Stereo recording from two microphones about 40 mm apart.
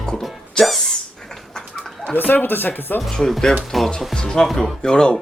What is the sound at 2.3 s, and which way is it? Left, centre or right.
Speech, left.